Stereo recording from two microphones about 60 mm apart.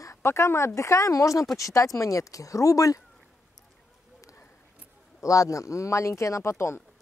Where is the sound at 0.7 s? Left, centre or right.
Left.